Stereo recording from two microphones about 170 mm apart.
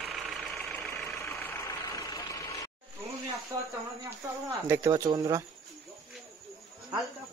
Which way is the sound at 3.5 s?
20° right (ahead or behind).